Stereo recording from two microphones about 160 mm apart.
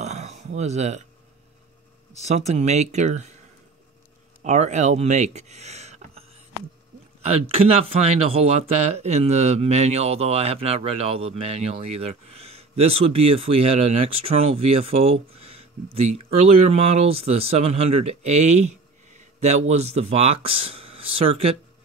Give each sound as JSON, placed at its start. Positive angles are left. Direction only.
{"t": 0.0, "sound": "a sound", "side_deg": -45}
{"t": 2.1, "sound": "speech", "side_deg": -45}
{"t": 4.4, "sound": "speech", "side_deg": -50}